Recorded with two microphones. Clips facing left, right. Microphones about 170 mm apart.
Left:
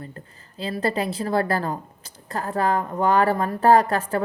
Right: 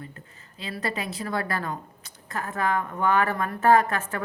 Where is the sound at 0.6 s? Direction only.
30° left (ahead or behind).